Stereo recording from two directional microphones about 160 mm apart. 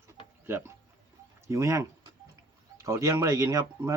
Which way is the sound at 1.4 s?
20° right (ahead or behind).